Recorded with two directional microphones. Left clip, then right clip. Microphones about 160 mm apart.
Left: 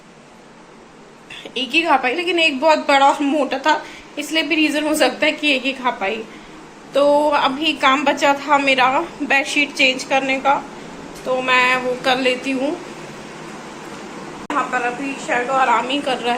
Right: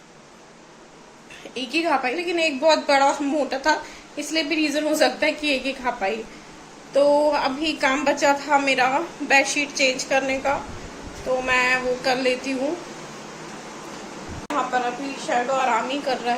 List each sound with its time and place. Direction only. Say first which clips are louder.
1.5 s a woman's voice: left 6 dB; 5° right (ahead or behind)
14.5 s a woman's voice: left 3 dB; 20° right (ahead or behind)
15.9 s a woman's voice: left 4 dB; 5° right (ahead or behind)